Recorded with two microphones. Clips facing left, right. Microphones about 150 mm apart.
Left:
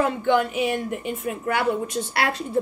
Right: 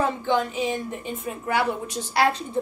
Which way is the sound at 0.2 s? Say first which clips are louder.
Left 3 dB; 65° left (ahead or behind).